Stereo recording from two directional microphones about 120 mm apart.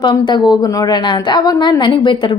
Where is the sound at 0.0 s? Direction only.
40° left (ahead or behind).